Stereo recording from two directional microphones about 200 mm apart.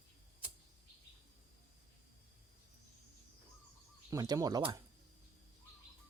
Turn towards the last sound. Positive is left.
turn(degrees=-20)  # may be behind; listen again after turning